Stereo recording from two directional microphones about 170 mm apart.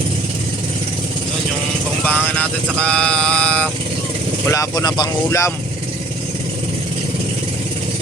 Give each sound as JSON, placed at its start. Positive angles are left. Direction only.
{"t": 2.0, "sound": "vehicle", "side_deg": 10}
{"t": 2.7, "sound": "a sound", "side_deg": 5}
{"t": 4.4, "sound": "speech", "side_deg": 20}